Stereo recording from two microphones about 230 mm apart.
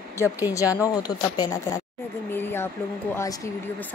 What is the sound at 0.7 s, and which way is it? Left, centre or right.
Speech, centre.